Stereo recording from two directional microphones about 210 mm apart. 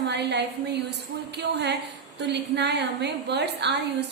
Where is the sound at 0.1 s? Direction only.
55° right (ahead or behind).